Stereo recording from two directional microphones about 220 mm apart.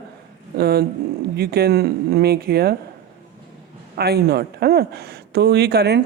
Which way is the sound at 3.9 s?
45° right (ahead or behind).